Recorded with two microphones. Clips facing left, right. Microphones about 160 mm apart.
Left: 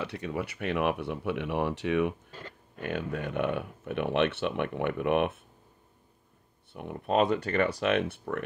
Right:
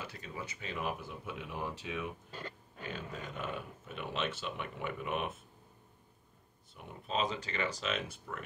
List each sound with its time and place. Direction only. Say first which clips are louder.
0.0 s speech: left 11 dB; 70° left (ahead or behind)
6.7 s speech: left 10 dB; 60° left (ahead or behind)